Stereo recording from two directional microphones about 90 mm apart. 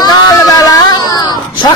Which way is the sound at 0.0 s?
45° left (ahead or behind).